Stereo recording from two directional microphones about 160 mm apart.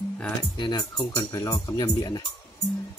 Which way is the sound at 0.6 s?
25° left (ahead or behind).